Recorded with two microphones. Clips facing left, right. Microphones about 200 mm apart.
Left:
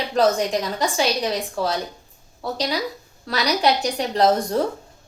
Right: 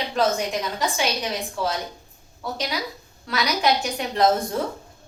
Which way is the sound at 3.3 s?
35° left (ahead or behind).